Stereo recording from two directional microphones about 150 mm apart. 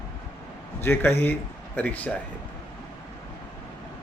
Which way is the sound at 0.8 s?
15° left (ahead or behind).